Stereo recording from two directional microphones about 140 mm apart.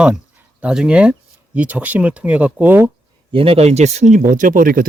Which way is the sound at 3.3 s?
40° right (ahead or behind).